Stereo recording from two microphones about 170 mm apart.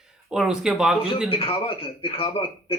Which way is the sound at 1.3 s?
35° left (ahead or behind).